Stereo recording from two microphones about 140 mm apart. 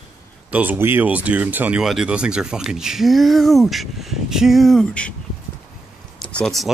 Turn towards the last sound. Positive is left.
turn(degrees=0)  # may be behind; listen again after turning